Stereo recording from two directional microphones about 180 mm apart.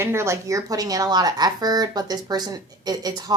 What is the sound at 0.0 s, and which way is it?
Speech, 15° right (ahead or behind).